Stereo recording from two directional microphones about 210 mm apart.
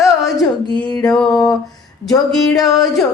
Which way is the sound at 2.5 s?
15° left (ahead or behind).